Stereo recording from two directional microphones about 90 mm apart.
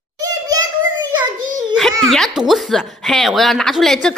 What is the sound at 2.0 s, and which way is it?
Speech, 5° left (ahead or behind).